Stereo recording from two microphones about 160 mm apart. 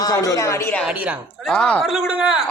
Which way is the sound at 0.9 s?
5° right (ahead or behind).